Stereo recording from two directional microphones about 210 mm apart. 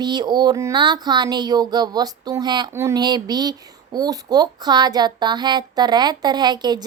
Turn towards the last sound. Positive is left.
turn(degrees=-20)  # may be behind; listen again after turning